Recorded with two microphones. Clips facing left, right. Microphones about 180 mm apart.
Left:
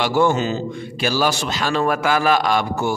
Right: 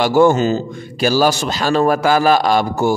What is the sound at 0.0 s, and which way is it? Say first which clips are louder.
A man's voice: right 5 dB; 45° right (ahead or behind).